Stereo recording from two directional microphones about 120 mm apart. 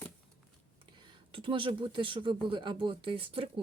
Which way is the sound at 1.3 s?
45° right (ahead or behind).